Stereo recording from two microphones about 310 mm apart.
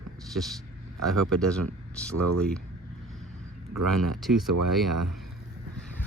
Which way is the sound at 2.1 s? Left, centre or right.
Right.